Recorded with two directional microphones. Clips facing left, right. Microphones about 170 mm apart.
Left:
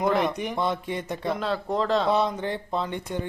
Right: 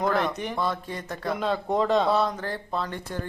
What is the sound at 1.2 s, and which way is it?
Speech, centre (ahead or behind).